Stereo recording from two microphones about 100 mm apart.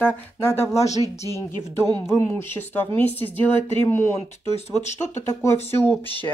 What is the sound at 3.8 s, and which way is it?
Speech, 30° left (ahead or behind).